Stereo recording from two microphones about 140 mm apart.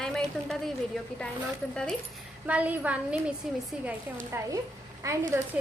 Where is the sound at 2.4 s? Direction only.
10° right (ahead or behind).